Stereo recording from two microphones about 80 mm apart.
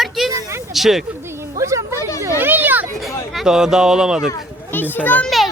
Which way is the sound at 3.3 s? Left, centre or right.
Centre.